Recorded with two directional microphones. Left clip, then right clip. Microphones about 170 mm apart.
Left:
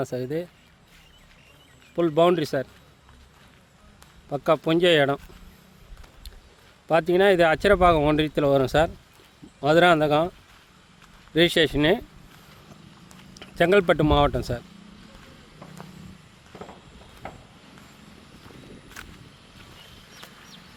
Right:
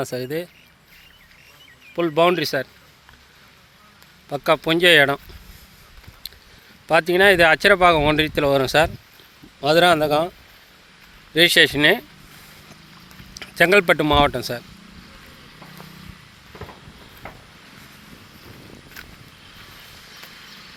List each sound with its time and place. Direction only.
0.0 s speech: centre (ahead or behind)
2.0 s speech: 15° left (ahead or behind)
4.3 s speech: 5° left (ahead or behind)
6.2 s a sound: 5° left (ahead or behind)
6.8 s speech: 5° left (ahead or behind)
11.3 s speech: 5° left (ahead or behind)
13.3 s speech: centre (ahead or behind)
17.2 s a sound: 65° left (ahead or behind)
19.0 s a sound: 5° right (ahead or behind)